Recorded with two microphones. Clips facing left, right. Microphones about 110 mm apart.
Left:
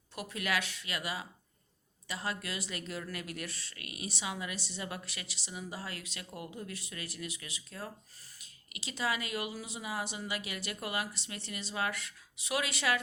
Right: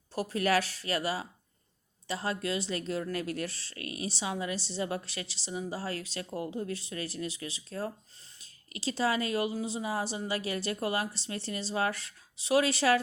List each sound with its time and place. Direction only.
0.1 s a woman's voice: 35° right (ahead or behind)